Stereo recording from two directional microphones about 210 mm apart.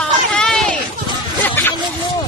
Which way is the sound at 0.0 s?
5° left (ahead or behind).